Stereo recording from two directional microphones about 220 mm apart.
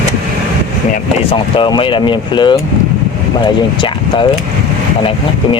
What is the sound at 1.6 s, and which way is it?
Speech, 20° left (ahead or behind).